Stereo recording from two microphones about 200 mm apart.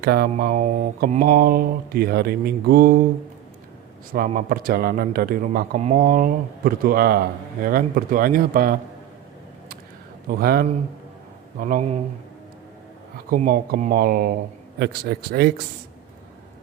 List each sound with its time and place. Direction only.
0.0 s mantra: 50° right (ahead or behind)
4.1 s mantra: 45° right (ahead or behind)
10.2 s mantra: 50° right (ahead or behind)
11.6 s speech: 40° right (ahead or behind)
13.3 s mantra: 45° right (ahead or behind)